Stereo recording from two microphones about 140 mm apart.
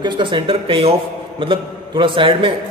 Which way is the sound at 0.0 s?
35° right (ahead or behind).